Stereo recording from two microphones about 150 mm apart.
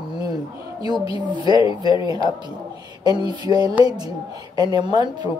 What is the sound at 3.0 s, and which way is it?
A woman's voice, 30° right (ahead or behind).